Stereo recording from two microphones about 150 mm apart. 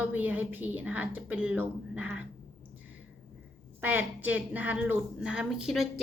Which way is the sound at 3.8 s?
10° right (ahead or behind).